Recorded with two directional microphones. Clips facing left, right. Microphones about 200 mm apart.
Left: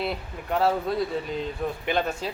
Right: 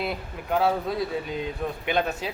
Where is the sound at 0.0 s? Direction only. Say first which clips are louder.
Even; centre (ahead or behind).